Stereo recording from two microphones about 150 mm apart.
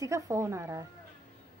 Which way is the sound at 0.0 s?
20° right (ahead or behind).